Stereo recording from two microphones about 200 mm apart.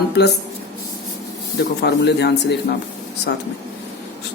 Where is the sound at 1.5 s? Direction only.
60° left (ahead or behind).